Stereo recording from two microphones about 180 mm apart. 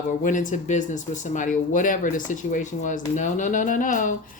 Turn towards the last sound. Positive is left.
turn(degrees=45)  # may be behind; listen again after turning